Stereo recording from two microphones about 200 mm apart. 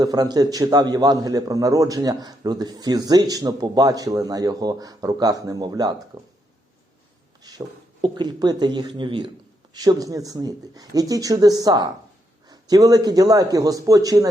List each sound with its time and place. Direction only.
0.0 s a man's voice: 20° right (ahead or behind)
7.4 s a sound: 20° right (ahead or behind)
8.0 s a man's voice: 20° right (ahead or behind)